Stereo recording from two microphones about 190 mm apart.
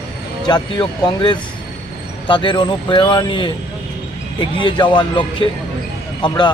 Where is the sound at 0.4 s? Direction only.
25° left (ahead or behind).